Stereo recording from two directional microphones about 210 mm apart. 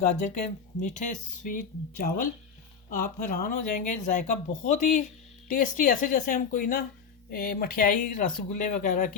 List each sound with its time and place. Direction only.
0.0 s speech: 40° left (ahead or behind)
2.9 s speech: 40° left (ahead or behind)